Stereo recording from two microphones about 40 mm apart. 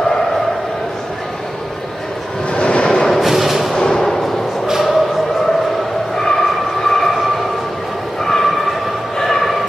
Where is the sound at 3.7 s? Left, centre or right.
Centre.